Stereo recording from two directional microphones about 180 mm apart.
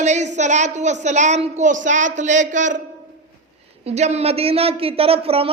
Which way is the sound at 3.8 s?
35° right (ahead or behind).